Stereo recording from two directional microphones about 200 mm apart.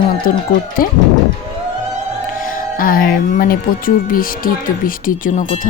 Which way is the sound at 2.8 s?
45° left (ahead or behind).